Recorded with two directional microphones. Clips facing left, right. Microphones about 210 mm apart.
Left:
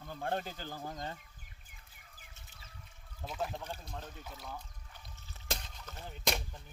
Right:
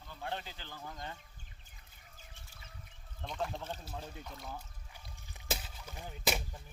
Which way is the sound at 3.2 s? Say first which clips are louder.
Even; 5° left (ahead or behind).